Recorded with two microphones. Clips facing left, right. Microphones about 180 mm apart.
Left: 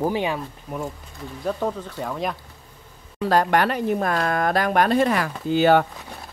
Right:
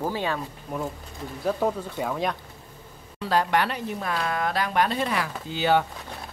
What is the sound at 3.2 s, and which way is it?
Speech, 50° left (ahead or behind).